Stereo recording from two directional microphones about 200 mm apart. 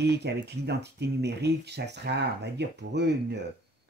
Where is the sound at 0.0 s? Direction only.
55° right (ahead or behind).